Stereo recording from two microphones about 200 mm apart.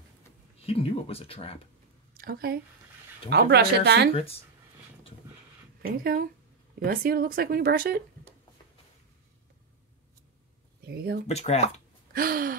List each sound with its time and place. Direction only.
0.6 s speech: 30° left (ahead or behind)
2.1 s speech: 50° right (ahead or behind)
4.1 s speech: 30° left (ahead or behind)
5.8 s speech: 50° right (ahead or behind)
10.9 s speech: 50° right (ahead or behind)
11.2 s speech: 30° left (ahead or behind)
12.1 s gasp: 45° right (ahead or behind)